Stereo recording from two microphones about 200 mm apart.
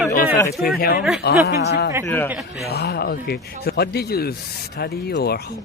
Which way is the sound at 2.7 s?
55° left (ahead or behind).